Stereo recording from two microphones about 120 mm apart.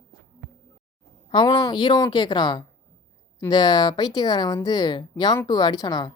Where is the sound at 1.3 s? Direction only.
40° left (ahead or behind).